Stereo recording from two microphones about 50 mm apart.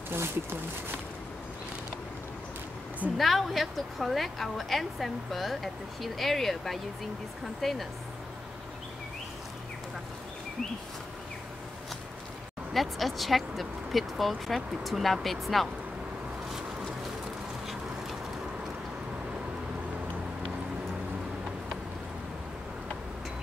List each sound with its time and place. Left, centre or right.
0.1 s speech: right
3.2 s a woman's voice: centre
12.7 s a woman's voice: centre